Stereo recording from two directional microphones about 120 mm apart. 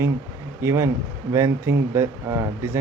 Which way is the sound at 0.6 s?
25° right (ahead or behind).